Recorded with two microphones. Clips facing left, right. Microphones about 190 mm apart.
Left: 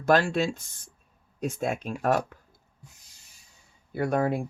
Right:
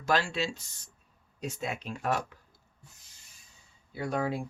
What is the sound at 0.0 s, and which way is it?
Speech, 55° left (ahead or behind).